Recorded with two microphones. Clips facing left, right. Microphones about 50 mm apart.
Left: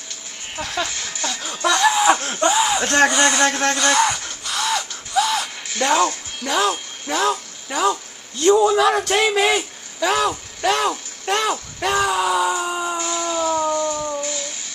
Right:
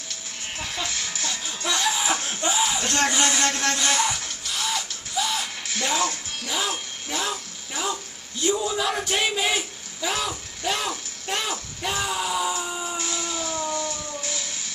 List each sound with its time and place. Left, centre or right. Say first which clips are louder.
1.4 s music: left 10 dB; left
1.8 s laughter: left 10 dB; left
2.4 s a sound: left 7 dB; left
2.8 s speech: left 7 dB; left
3.2 s speech: left 6 dB; left
3.7 s a sound: left 6 dB; left
5.8 s speech: left 8 dB; left
7.1 s a sound: left 9 dB; left
8.4 s a child's voice: left 10 dB; left
11.8 s speech: left 8 dB; left
13.0 s music: left 8 dB; centre